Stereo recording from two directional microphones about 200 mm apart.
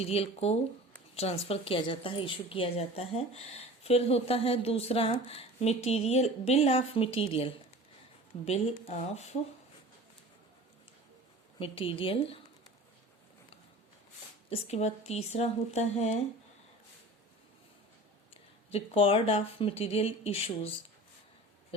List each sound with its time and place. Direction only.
0.0 s a woman's voice: 30° left (ahead or behind)
8.9 s a woman's voice: 35° left (ahead or behind)
11.6 s a woman's voice: 25° left (ahead or behind)
14.5 s a woman's voice: 35° left (ahead or behind)
18.7 s a woman's voice: 30° left (ahead or behind)